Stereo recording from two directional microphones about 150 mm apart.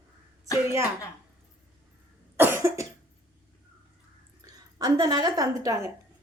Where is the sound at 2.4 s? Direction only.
15° right (ahead or behind).